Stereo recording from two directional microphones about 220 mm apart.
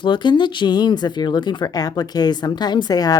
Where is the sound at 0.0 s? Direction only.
20° left (ahead or behind).